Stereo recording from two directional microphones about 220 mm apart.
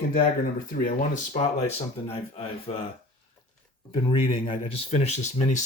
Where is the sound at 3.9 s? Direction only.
25° left (ahead or behind).